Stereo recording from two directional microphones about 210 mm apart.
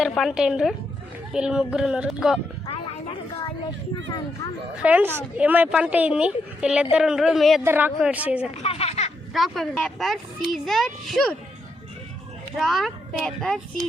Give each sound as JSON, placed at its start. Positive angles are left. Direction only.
{"t": 0.0, "sound": "speech", "side_deg": 0}
{"t": 2.6, "sound": "a sound", "side_deg": 25}
{"t": 4.8, "sound": "a woman's voice", "side_deg": -5}
{"t": 8.5, "sound": "children playing", "side_deg": 30}
{"t": 9.3, "sound": "speech", "side_deg": 0}
{"t": 12.5, "sound": "speech", "side_deg": 0}